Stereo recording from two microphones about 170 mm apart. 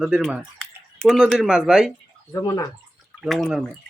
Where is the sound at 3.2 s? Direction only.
Centre (ahead or behind).